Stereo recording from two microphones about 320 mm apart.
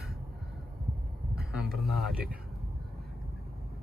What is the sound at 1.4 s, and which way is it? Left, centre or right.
Speech, centre.